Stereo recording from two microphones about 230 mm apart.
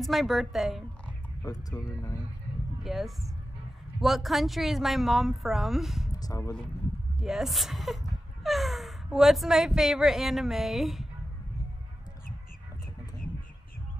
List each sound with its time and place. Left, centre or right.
0.0 s speech: centre
1.4 s speech: centre
2.8 s speech: centre
6.1 s speech: centre
7.2 s speech: centre